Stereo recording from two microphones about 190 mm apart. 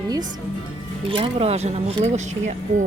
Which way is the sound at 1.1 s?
30° right (ahead or behind).